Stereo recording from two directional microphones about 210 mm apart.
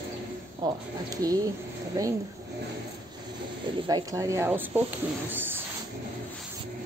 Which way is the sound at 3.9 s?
15° right (ahead or behind).